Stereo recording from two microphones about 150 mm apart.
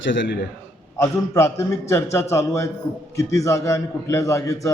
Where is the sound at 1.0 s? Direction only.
20° left (ahead or behind).